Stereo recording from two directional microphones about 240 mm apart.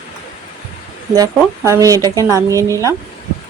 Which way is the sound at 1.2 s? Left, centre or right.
Centre.